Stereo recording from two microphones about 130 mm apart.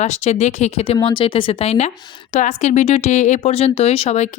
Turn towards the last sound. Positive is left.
turn(degrees=60)  # may be behind; listen again after turning